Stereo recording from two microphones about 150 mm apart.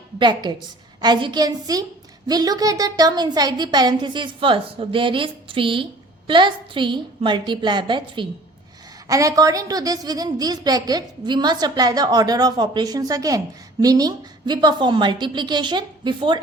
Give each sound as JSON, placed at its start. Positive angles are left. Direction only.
{"t": 0.2, "sound": "a woman's voice", "side_deg": -30}